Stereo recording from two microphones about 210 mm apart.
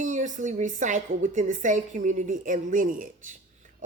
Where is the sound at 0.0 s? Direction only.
35° right (ahead or behind).